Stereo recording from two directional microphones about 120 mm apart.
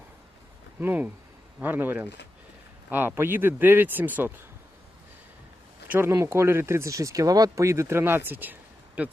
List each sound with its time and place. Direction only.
0.8 s speech: 15° right (ahead or behind)
5.9 s speech: 20° right (ahead or behind)